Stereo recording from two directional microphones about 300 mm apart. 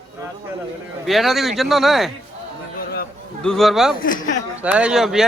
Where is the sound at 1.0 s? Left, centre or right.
Centre.